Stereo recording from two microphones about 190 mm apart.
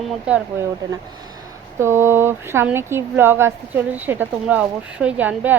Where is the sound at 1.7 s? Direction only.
15° right (ahead or behind).